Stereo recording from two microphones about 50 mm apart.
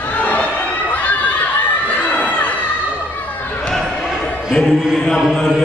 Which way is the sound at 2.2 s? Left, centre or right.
Left.